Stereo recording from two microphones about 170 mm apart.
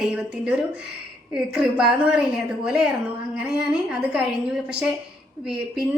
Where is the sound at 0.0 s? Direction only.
5° right (ahead or behind).